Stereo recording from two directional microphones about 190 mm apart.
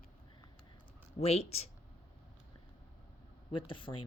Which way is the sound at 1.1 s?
30° left (ahead or behind).